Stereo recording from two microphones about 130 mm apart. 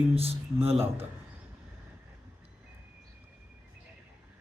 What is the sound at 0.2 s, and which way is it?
Speech, 50° right (ahead or behind).